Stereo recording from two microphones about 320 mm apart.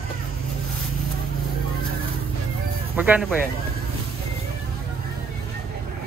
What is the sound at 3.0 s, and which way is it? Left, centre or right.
Speech, centre.